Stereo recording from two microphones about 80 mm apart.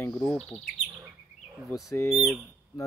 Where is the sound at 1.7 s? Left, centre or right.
Left.